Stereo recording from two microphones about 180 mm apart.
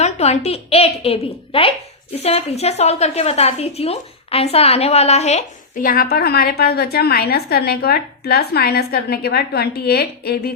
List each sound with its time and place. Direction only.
0.0 s a woman's voice: 35° left (ahead or behind)
5.8 s a woman's voice: 55° left (ahead or behind)